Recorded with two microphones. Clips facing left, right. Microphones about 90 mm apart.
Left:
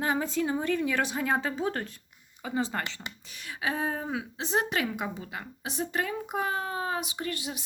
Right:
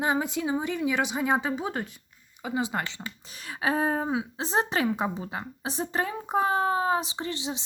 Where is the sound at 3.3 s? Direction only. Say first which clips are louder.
Right 5 dB; 35° right (ahead or behind).